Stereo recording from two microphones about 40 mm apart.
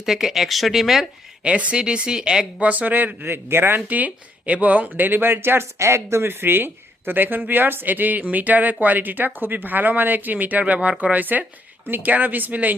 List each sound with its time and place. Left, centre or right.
0.0 s speech: centre
1.5 s speech: right
2.6 s speech: right
3.2 s speech: right
3.8 s speech: right
6.2 s speech: right
10.3 s speech: right